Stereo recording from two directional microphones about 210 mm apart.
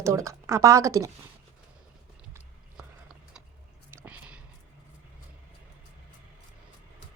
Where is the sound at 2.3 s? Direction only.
5° right (ahead or behind).